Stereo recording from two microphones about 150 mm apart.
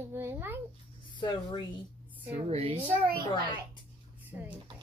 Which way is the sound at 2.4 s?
45° right (ahead or behind).